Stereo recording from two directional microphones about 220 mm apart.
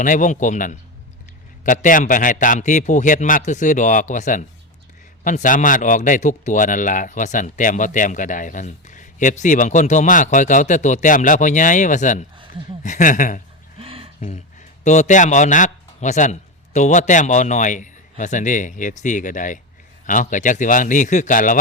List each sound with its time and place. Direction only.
0.0 s speech: 35° left (ahead or behind)
13.7 s a sound: 25° right (ahead or behind)
14.8 s speech: 35° left (ahead or behind)